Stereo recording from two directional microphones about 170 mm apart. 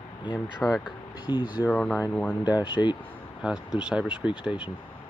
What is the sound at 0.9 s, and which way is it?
Speech, 25° left (ahead or behind).